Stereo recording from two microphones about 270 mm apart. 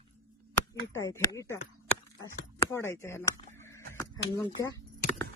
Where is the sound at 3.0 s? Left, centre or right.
Centre.